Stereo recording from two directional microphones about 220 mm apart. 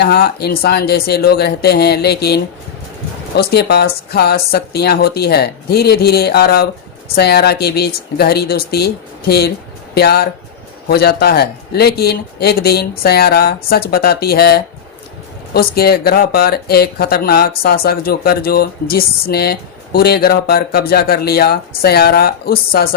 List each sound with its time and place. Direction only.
0.0 s speech: 45° left (ahead or behind)